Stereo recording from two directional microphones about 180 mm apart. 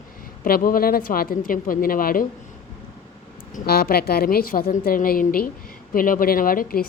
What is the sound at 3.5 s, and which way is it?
A woman's voice, 55° left (ahead or behind).